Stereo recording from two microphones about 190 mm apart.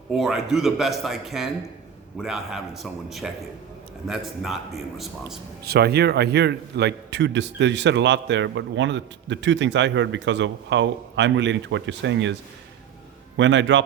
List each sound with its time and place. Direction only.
0.1 s a man's voice: centre (ahead or behind)
5.6 s a man's voice: 55° right (ahead or behind); by 13.8 s 70° right (ahead or behind)